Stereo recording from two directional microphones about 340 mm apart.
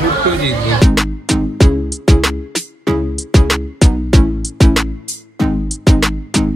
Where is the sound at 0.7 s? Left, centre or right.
Centre.